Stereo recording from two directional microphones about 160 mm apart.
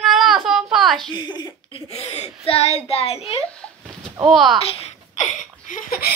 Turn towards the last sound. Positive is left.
turn(degrees=55)  # may be behind; listen again after turning